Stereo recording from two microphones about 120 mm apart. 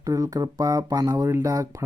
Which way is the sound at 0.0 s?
30° right (ahead or behind).